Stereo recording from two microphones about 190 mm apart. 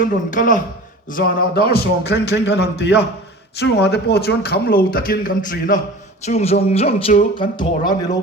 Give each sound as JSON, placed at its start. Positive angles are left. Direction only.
{"t": 0.3, "sound": "a man's voice", "side_deg": 45}
{"t": 6.2, "sound": "speech", "side_deg": 35}